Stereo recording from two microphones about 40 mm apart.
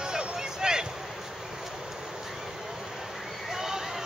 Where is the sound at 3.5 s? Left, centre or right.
Centre.